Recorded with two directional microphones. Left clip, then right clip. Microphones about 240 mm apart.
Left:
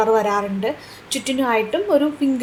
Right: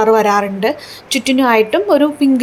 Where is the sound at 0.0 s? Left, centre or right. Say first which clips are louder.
Right 6 dB; right.